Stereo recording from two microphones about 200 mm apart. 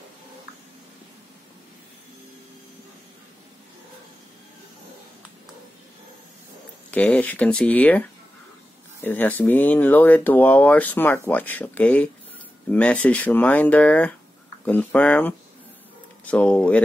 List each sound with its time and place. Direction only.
6.9 s speech: 5° left (ahead or behind)
9.0 s speech: 10° left (ahead or behind)